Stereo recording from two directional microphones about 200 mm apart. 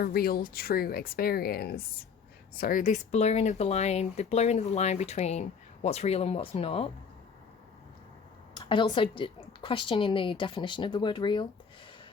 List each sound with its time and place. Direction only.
0.0 s speech: 50° left (ahead or behind); by 6.9 s 30° left (ahead or behind)
8.5 s a woman's voice: 25° left (ahead or behind)